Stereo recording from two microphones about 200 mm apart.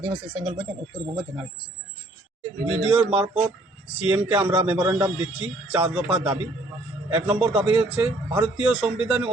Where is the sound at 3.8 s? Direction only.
5° right (ahead or behind).